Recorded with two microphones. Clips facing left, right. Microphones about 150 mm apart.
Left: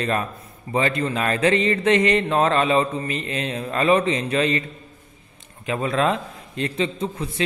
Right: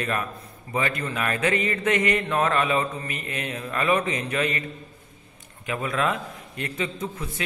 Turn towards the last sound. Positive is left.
turn(degrees=30)  # may be behind; listen again after turning